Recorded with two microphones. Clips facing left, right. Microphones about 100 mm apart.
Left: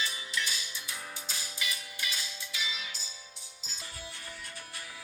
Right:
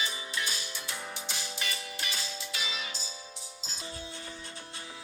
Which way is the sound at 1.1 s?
70° right (ahead or behind).